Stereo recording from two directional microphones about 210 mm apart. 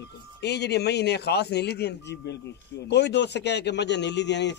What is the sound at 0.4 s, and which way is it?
A man's voice, 50° left (ahead or behind).